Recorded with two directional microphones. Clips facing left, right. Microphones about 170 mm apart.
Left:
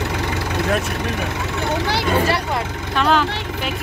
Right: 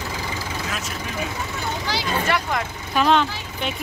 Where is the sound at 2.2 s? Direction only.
35° left (ahead or behind).